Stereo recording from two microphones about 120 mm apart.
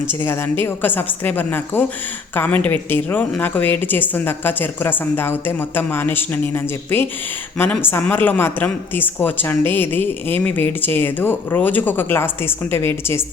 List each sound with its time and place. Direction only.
0.2 s a woman's voice: 20° left (ahead or behind)